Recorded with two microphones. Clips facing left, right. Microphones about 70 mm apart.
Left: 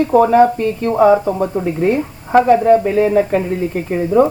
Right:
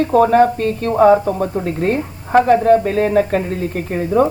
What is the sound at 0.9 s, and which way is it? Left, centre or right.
Speech, centre.